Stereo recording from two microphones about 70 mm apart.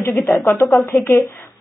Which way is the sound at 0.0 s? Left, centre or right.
Left.